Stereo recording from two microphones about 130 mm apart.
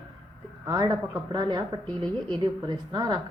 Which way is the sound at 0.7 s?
25° right (ahead or behind).